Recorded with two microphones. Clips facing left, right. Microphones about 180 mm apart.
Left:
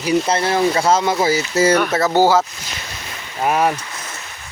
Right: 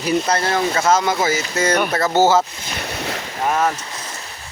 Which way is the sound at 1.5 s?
10° left (ahead or behind).